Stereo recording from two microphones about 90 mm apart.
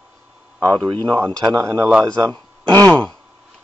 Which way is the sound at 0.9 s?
55° right (ahead or behind).